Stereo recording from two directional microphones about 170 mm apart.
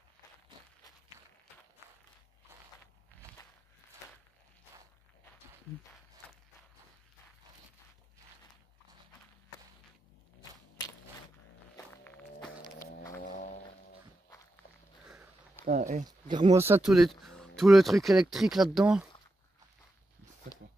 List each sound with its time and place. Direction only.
11.7 s walk: 15° left (ahead or behind)
13.2 s music: 55° left (ahead or behind)
15.6 s speech: 50° right (ahead or behind)
16.1 s a sound: 25° right (ahead or behind)
16.5 s speech: 15° right (ahead or behind)
16.8 s speech: centre (ahead or behind)